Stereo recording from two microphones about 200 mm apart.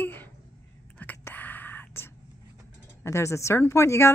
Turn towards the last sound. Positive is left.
turn(degrees=15)  # may be behind; listen again after turning